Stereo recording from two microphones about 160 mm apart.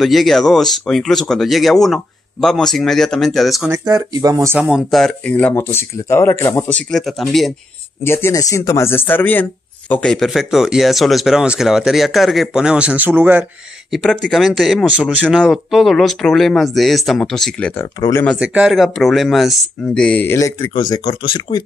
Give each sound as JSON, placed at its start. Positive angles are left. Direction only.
{"t": 0.0, "sound": "speech", "side_deg": 0}
{"t": 3.7, "sound": "speech", "side_deg": -25}
{"t": 4.6, "sound": "speech", "side_deg": -5}
{"t": 6.9, "sound": "speech", "side_deg": 0}
{"t": 8.0, "sound": "speech", "side_deg": 15}
{"t": 13.9, "sound": "speech", "side_deg": 0}
{"t": 20.9, "sound": "speech", "side_deg": 30}